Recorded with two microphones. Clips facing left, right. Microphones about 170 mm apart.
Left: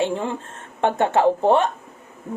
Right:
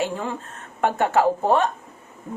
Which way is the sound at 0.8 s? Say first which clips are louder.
Left 1 dB; 25° left (ahead or behind).